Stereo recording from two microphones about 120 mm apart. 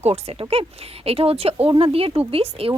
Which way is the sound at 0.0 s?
55° right (ahead or behind).